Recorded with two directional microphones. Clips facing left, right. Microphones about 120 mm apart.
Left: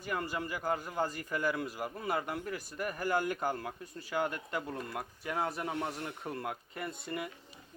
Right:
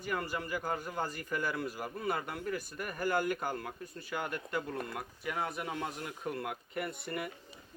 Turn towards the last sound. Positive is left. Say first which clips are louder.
# even
turn(degrees=25)  # may be behind; listen again after turning